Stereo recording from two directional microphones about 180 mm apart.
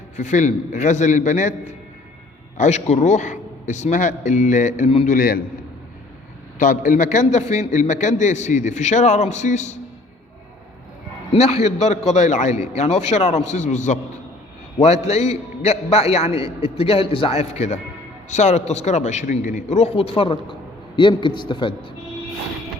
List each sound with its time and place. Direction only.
0.2 s a man's voice: 40° left (ahead or behind)
2.6 s a man's voice: 40° left (ahead or behind)
5.1 s a man's voice: 50° left (ahead or behind)
6.6 s a man's voice: 45° left (ahead or behind)
11.3 s a man's voice: 35° left (ahead or behind)
15.0 s a man's voice: 35° left (ahead or behind)